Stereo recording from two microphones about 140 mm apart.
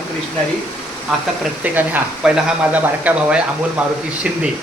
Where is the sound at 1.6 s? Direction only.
10° right (ahead or behind).